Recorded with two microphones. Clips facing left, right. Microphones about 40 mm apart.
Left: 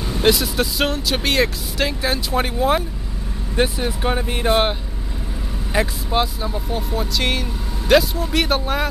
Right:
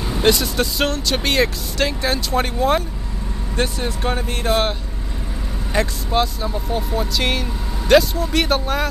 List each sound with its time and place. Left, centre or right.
0.1 s speech: centre